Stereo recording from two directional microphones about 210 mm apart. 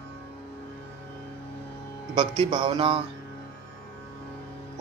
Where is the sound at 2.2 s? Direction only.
25° right (ahead or behind).